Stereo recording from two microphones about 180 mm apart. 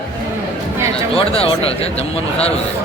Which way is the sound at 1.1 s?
30° left (ahead or behind).